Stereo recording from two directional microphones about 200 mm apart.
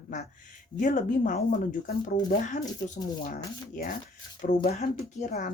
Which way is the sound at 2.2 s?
20° left (ahead or behind).